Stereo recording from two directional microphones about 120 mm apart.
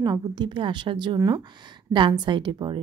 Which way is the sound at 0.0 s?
35° right (ahead or behind).